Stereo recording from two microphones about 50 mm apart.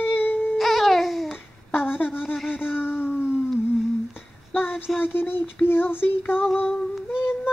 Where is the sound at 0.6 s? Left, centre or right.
Centre.